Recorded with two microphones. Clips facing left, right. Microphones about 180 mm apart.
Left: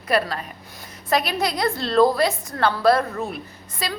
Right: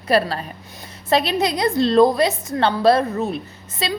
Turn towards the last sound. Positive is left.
turn(degrees=-25)  # may be behind; listen again after turning